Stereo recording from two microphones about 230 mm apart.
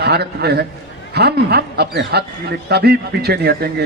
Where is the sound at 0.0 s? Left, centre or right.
Right.